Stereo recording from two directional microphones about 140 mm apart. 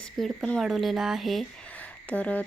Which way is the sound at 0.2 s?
5° left (ahead or behind).